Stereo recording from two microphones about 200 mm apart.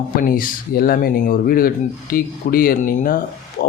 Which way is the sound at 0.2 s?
45° left (ahead or behind).